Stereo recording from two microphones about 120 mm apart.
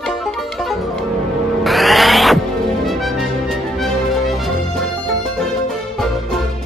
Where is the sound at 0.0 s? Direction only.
Centre (ahead or behind).